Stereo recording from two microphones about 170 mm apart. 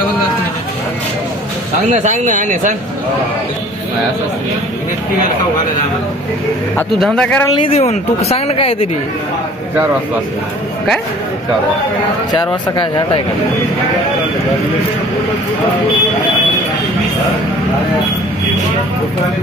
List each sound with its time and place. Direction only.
1.9 s speech: 45° right (ahead or behind)
7.0 s speech: 5° left (ahead or behind)
7.4 s speech: 30° left (ahead or behind)
12.3 s speech: 25° left (ahead or behind)